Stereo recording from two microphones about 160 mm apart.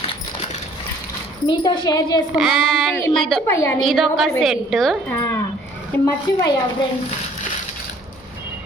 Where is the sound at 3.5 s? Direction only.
20° left (ahead or behind).